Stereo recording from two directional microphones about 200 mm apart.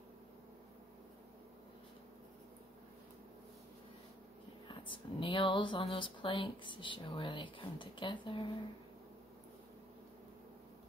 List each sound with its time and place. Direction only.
4.6 s speech: 25° left (ahead or behind)